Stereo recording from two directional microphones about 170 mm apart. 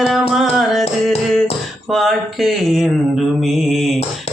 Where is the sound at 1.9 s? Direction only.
Centre (ahead or behind).